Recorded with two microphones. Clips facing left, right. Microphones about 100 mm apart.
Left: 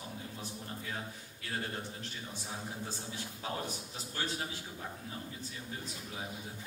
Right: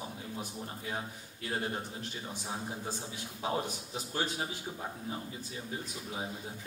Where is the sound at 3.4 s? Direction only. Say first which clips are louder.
Right 6 dB; 20° right (ahead or behind).